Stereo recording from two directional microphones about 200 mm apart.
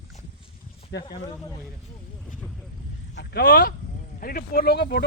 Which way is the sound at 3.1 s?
50° left (ahead or behind).